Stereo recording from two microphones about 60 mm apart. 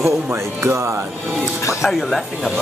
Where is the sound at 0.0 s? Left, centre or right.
Right.